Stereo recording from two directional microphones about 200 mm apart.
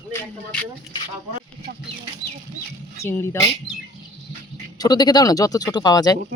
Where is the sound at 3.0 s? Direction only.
15° left (ahead or behind).